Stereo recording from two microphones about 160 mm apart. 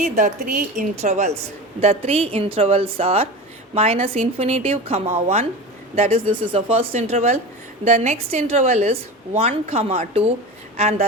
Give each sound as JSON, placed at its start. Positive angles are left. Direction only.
{"t": 0.0, "sound": "a woman's voice", "side_deg": -55}